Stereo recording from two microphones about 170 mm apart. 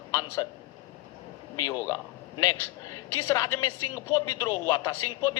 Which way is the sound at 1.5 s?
15° left (ahead or behind).